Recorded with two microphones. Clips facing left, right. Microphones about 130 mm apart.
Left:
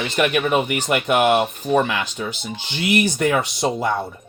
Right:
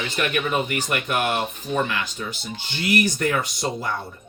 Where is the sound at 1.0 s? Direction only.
90° left.